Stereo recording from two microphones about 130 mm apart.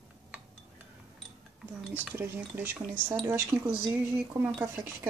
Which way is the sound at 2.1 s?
15° right (ahead or behind).